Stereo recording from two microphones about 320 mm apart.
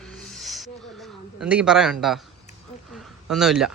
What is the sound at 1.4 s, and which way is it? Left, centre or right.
Speech, centre.